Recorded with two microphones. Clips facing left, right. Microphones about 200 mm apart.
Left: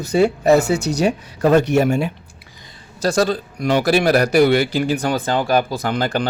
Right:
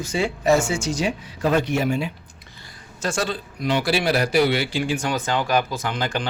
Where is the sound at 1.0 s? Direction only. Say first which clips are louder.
Left 9 dB; 45° left (ahead or behind).